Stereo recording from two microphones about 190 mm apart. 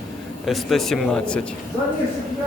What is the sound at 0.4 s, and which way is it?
Speech, centre (ahead or behind).